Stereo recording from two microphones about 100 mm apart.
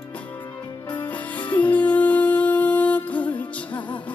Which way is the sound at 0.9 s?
15° left (ahead or behind).